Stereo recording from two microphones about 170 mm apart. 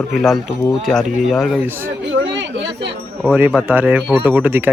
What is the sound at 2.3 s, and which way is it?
Chatter, 90° right.